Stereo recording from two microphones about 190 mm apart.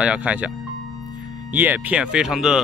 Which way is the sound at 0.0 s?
5° right (ahead or behind).